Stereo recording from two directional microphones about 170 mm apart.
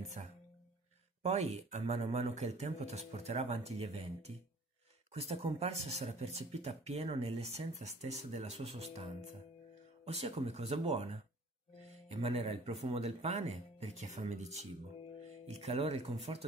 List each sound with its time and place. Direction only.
0.2 s speech: 45° right (ahead or behind)
12.1 s speech: 35° right (ahead or behind)